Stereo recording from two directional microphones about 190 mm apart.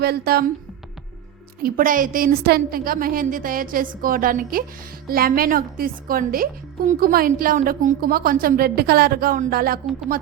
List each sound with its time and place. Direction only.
0.0 s a woman's voice: 55° right (ahead or behind)
1.6 s a woman's voice: 45° right (ahead or behind)